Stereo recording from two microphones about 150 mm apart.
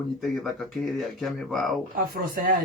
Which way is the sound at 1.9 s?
80° right.